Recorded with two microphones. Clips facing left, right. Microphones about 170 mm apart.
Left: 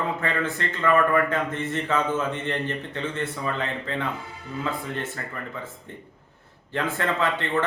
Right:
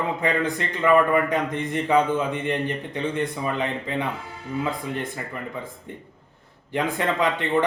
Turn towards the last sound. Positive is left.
turn(degrees=-15)  # may be behind; listen again after turning